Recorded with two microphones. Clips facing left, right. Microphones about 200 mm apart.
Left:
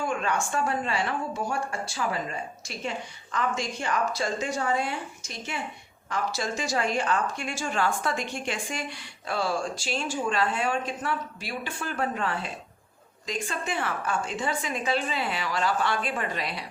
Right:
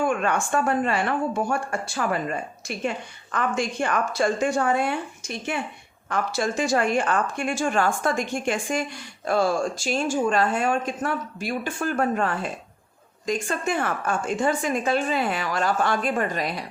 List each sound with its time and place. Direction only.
0.0 s a woman's voice: 55° right (ahead or behind)